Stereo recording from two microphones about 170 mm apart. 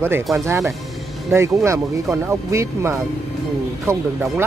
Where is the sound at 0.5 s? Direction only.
15° right (ahead or behind).